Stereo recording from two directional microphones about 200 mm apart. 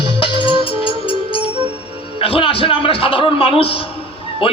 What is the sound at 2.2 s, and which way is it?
A man's voice, 25° left (ahead or behind).